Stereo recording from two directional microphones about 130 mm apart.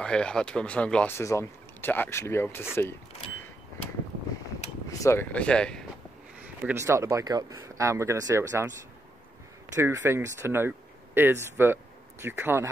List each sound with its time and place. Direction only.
0.0 s speech: 5° left (ahead or behind)
1.1 s speech: 20° left (ahead or behind)
5.0 s speech: 20° left (ahead or behind)
6.7 s speech: 20° right (ahead or behind)
9.8 s speech: 20° right (ahead or behind)